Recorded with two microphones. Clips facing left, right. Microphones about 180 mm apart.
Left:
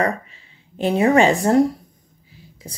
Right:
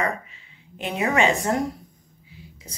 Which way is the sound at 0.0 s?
35° left (ahead or behind).